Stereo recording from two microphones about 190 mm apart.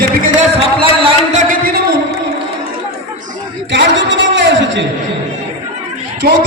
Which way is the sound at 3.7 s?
75° right (ahead or behind).